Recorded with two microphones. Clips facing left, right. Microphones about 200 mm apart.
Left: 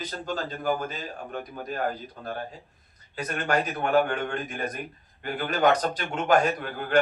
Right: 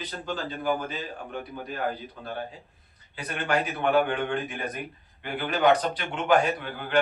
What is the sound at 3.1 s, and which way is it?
A man's voice, 40° left (ahead or behind).